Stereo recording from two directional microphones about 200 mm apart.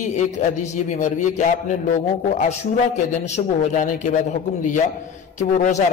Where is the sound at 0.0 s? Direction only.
35° left (ahead or behind).